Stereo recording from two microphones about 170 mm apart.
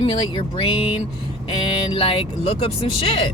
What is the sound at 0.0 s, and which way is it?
Music, 30° left (ahead or behind).